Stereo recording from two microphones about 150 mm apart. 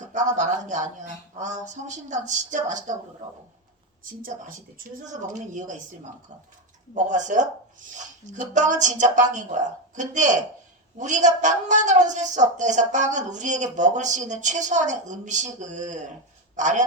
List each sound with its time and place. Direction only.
0.1 s a woman's voice: 55° right (ahead or behind)
5.0 s a woman's voice: 55° right (ahead or behind)
6.9 s a woman's voice: 55° right (ahead or behind)
8.5 s a woman's voice: 55° right (ahead or behind)